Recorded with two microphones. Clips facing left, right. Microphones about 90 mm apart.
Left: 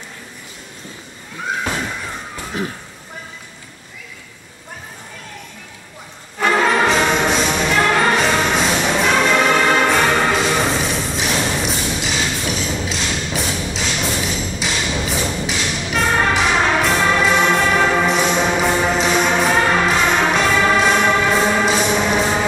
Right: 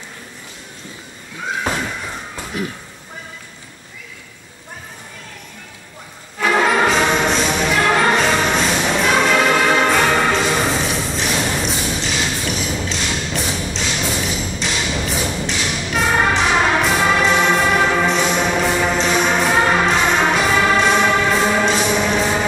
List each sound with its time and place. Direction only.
2.5 s speech: 30° left (ahead or behind)
6.4 s music: 5° right (ahead or behind)
15.0 s thump: centre (ahead or behind)
15.4 s music: 5° left (ahead or behind)
15.9 s music: 5° right (ahead or behind)